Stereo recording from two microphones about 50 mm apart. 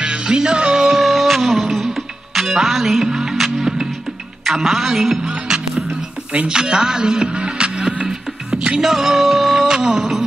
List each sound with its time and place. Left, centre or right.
0.0 s music: centre
0.9 s music: centre
4.5 s speech: centre
5.3 s music: centre
8.8 s music: centre